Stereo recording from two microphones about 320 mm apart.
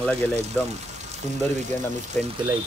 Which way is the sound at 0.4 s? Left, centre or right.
Right.